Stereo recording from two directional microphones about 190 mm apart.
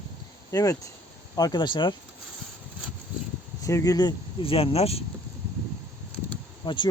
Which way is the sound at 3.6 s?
20° left (ahead or behind).